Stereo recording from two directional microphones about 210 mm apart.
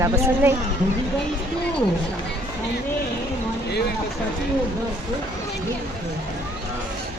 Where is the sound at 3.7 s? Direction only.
50° left (ahead or behind).